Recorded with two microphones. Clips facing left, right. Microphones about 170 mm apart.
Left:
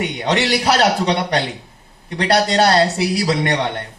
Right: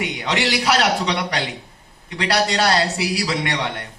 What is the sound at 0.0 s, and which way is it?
A man's voice, 40° left (ahead or behind).